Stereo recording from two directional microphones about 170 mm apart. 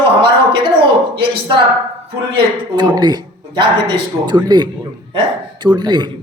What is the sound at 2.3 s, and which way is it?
A man's voice, 25° right (ahead or behind).